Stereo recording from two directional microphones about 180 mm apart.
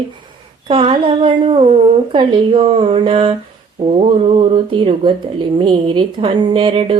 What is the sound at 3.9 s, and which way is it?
Speech, 35° right (ahead or behind).